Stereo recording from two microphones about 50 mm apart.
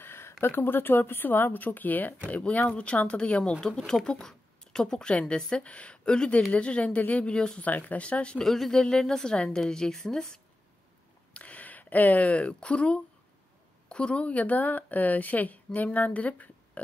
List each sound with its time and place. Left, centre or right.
0.0 s a woman's voice: left
7.3 s a woman's voice: centre
7.6 s speech: left
8.5 s a woman's voice: centre
11.3 s a woman's voice: left